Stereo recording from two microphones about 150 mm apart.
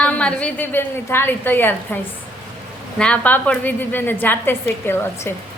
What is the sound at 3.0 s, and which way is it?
A woman's voice, 10° left (ahead or behind).